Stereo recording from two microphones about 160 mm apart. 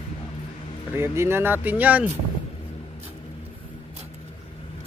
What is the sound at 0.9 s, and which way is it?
Speech, 15° right (ahead or behind).